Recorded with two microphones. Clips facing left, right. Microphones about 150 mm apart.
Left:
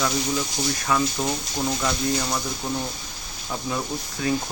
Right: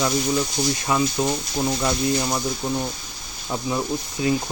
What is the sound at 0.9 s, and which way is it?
Speech, 20° right (ahead or behind).